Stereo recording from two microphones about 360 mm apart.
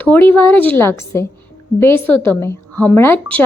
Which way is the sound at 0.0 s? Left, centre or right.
Centre.